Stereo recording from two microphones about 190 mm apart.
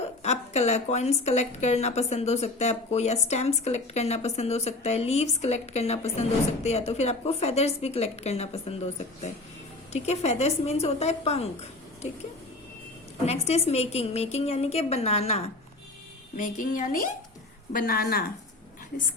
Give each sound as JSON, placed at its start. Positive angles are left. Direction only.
{"t": 0.2, "sound": "a woman's voice", "side_deg": 35}
{"t": 13.2, "sound": "a woman's voice", "side_deg": 35}
{"t": 16.4, "sound": "speech", "side_deg": 45}